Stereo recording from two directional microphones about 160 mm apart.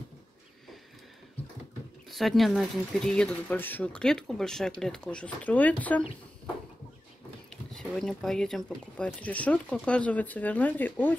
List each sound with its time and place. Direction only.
2.0 s speech: centre (ahead or behind)
7.7 s speech: centre (ahead or behind)